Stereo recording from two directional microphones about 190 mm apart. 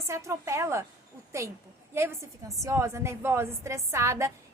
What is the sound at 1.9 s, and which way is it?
A woman's voice, 15° right (ahead or behind).